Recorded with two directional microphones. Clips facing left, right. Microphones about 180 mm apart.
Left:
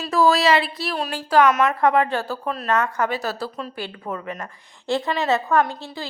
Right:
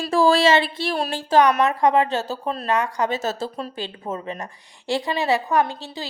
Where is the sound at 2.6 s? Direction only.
15° right (ahead or behind).